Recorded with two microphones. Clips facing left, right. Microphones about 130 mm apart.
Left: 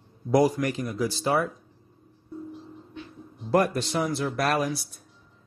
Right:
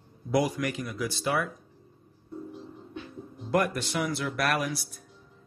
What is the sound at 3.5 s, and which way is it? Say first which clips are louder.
Speech: left 4 dB; 30° left (ahead or behind).